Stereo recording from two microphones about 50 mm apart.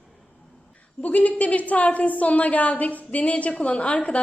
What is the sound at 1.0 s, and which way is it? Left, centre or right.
A woman's voice, left.